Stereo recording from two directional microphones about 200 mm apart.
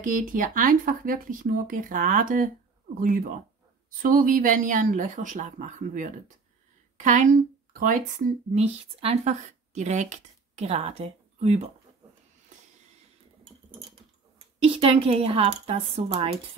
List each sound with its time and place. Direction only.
0.0 s a woman's voice: 45° right (ahead or behind)
14.6 s speech: 30° right (ahead or behind)